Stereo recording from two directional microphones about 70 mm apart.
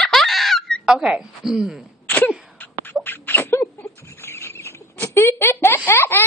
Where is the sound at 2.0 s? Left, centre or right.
Left.